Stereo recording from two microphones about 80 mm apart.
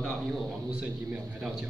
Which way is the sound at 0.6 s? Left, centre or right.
Centre.